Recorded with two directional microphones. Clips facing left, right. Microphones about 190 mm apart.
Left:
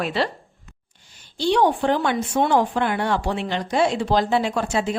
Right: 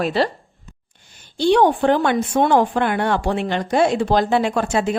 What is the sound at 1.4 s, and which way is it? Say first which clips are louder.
Speech: right 4 dB; 55° right (ahead or behind).